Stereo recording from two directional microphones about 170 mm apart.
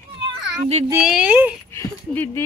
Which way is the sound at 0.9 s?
10° right (ahead or behind).